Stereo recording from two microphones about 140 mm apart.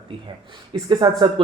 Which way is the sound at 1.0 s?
25° right (ahead or behind).